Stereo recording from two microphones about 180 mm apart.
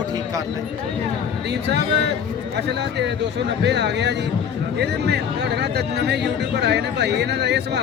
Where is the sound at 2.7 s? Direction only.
70° right (ahead or behind).